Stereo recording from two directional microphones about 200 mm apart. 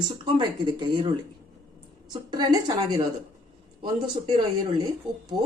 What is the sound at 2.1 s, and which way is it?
Speech, 20° right (ahead or behind).